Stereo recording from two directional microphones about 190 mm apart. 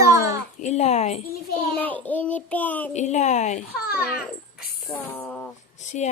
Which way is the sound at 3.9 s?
5° right (ahead or behind).